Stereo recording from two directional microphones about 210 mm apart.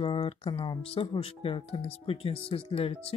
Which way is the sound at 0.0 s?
25° left (ahead or behind).